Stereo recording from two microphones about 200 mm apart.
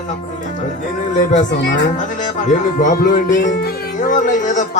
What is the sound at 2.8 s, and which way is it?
Speech, 45° left (ahead or behind).